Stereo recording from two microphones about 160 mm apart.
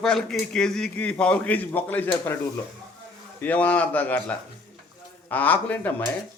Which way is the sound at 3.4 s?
10° left (ahead or behind).